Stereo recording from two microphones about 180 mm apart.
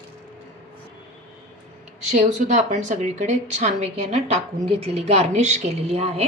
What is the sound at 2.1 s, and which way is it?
A woman's voice, 45° right (ahead or behind).